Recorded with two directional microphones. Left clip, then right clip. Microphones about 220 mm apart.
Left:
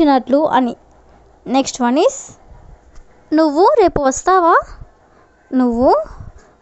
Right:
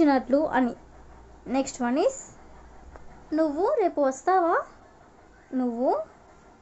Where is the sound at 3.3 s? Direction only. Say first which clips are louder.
Left 13 dB; 45° left (ahead or behind).